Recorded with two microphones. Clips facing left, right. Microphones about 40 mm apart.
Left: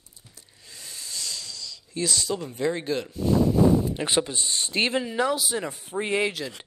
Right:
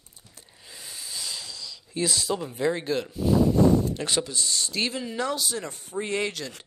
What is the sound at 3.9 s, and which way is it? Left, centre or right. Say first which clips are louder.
Speech: left 2 dB; left.